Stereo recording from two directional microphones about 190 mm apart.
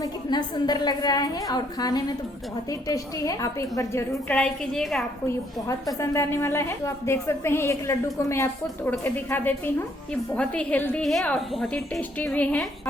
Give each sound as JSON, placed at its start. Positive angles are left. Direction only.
{"t": 0.0, "sound": "a woman's voice", "side_deg": 25}
{"t": 5.2, "sound": "a woman's voice", "side_deg": 15}